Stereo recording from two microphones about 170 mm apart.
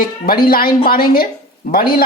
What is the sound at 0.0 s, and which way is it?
Speech, 60° left (ahead or behind).